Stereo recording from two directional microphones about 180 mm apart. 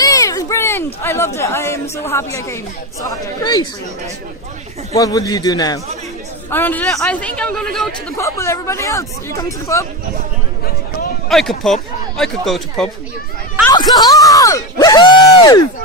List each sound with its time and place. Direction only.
0.0 s a sound: 20° left (ahead or behind)
1.0 s a man's voice: 15° left (ahead or behind)
4.9 s a man's voice: 20° left (ahead or behind)
8.2 s speech: 15° left (ahead or behind)
11.3 s speech: centre (ahead or behind)
13.7 s a sound: 20° left (ahead or behind)